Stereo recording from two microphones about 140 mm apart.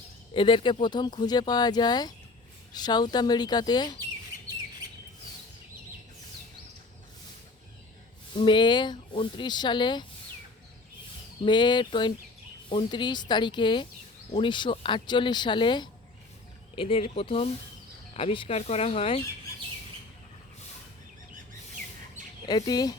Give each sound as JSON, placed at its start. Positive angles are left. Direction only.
{"t": 0.3, "sound": "speech", "side_deg": 35}
{"t": 8.4, "sound": "speech", "side_deg": 35}
{"t": 11.4, "sound": "speech", "side_deg": 30}
{"t": 22.4, "sound": "speech", "side_deg": 30}